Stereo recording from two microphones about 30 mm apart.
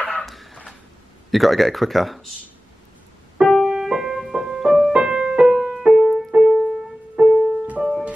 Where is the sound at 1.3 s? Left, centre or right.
Centre.